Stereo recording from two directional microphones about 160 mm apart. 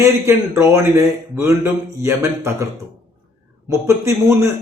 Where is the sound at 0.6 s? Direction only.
20° right (ahead or behind).